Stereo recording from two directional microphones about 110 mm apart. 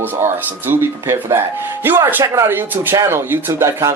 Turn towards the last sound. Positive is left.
turn(degrees=-25)  # may be behind; listen again after turning